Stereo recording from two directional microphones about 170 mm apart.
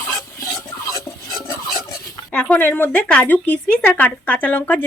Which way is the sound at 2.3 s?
5° left (ahead or behind).